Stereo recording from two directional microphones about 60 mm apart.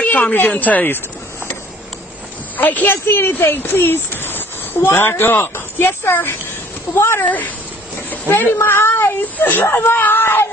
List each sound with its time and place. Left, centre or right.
0.0 s a woman's voice: left
2.5 s a woman's voice: left
7.2 s speech: left